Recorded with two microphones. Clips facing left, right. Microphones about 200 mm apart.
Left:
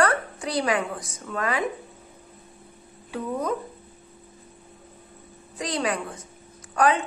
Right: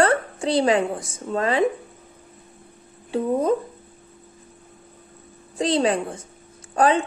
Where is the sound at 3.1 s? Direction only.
30° right (ahead or behind).